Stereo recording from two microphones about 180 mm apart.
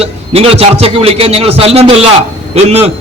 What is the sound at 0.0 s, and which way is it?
A man's voice, 30° right (ahead or behind).